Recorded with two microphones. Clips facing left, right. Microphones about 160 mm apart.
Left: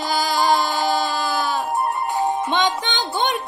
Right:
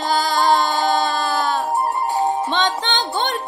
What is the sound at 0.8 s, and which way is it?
Music, 10° left (ahead or behind).